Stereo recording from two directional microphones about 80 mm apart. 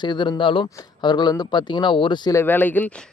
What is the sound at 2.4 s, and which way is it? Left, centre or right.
Speech, left.